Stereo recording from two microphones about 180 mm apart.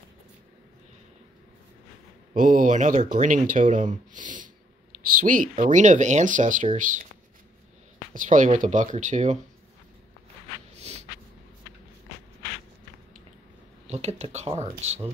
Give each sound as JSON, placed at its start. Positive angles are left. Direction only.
{"t": 2.3, "sound": "speech", "side_deg": -45}
{"t": 8.1, "sound": "speech", "side_deg": -45}
{"t": 10.8, "sound": "a sound", "side_deg": -35}
{"t": 13.8, "sound": "speech", "side_deg": -35}